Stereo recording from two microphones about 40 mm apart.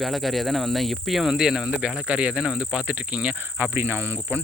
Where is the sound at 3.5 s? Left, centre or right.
Right.